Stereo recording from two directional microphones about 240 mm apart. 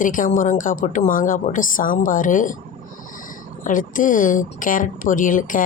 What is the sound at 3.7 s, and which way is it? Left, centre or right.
Speech, left.